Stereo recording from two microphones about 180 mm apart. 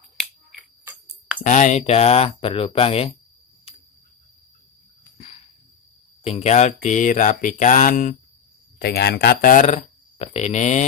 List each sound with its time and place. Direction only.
1.4 s speech: 40° left (ahead or behind)
5.1 s a sound: 40° left (ahead or behind)
6.2 s speech: 35° left (ahead or behind)
8.7 s speech: 60° left (ahead or behind); by 10.9 s 40° left (ahead or behind)